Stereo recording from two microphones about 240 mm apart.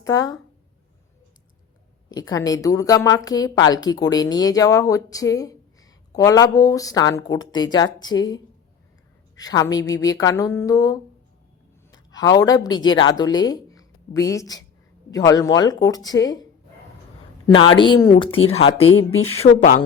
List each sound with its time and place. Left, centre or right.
0.0 s a woman's voice: centre
2.0 s a woman's voice: centre
12.1 s a woman's voice: centre
18.8 s speech: left
19.4 s speech: left